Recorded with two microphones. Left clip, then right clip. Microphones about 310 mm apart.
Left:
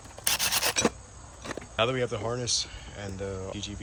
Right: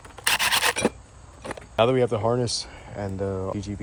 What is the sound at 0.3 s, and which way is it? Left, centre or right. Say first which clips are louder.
Rub: right 6 dB; centre.